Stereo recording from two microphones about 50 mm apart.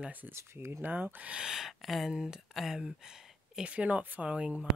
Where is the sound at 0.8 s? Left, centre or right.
Right.